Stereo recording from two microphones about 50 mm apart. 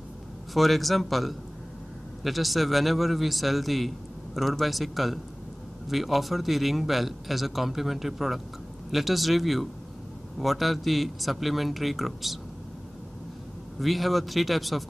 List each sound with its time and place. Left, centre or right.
0.6 s a man's voice: centre
13.7 s a man's voice: centre